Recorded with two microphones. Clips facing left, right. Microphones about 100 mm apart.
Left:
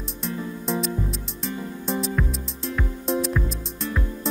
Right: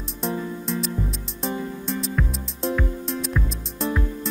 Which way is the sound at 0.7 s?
Centre (ahead or behind).